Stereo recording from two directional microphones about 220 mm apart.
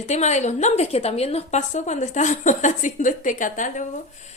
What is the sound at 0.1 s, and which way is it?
Speech, 30° left (ahead or behind).